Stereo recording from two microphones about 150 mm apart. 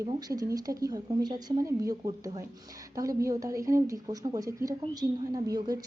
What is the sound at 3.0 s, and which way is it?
A woman's voice, 20° right (ahead or behind).